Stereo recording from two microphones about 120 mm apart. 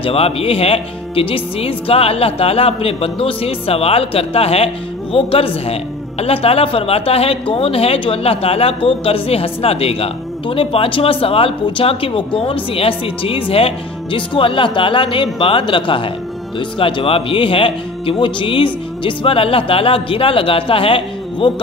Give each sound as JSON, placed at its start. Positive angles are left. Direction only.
{"t": 0.0, "sound": "speech", "side_deg": 55}